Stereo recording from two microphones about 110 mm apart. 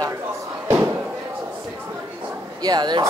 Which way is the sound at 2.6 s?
40° right (ahead or behind).